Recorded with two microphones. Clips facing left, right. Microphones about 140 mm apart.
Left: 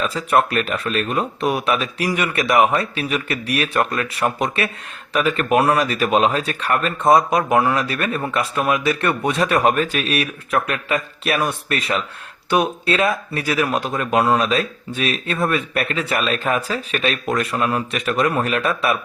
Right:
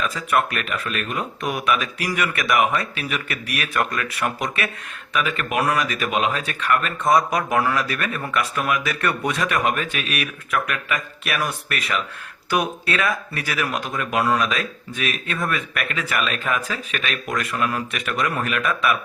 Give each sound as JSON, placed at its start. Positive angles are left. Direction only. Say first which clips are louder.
{"t": 0.0, "sound": "speech", "louder": "left 4 dB", "side_deg": 30}